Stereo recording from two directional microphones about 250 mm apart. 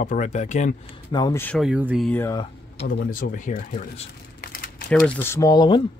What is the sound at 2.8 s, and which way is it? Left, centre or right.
Speech, left.